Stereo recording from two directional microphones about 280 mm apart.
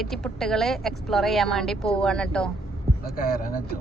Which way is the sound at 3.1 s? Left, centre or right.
Left.